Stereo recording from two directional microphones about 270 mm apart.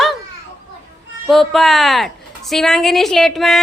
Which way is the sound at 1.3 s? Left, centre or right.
Centre.